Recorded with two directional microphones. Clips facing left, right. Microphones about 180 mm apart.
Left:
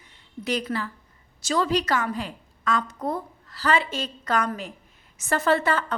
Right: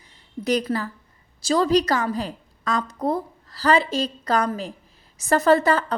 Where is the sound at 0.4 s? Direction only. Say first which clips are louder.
Right 5 dB; 40° right (ahead or behind).